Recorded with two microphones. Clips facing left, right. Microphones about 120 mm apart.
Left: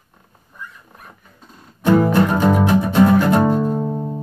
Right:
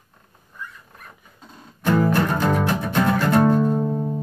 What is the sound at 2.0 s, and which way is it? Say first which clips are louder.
Music: left 4 dB; 20° left (ahead or behind).